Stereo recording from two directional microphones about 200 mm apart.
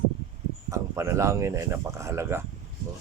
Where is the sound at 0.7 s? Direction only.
15° right (ahead or behind).